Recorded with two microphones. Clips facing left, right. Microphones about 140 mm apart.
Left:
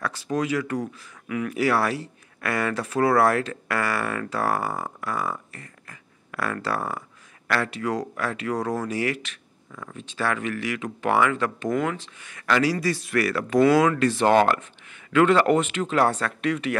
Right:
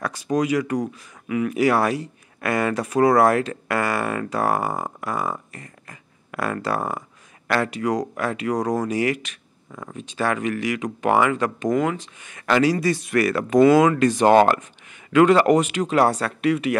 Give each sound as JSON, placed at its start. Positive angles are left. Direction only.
{"t": 0.0, "sound": "speech", "side_deg": -15}
{"t": 9.7, "sound": "speech", "side_deg": -25}
{"t": 9.9, "sound": "speech", "side_deg": -15}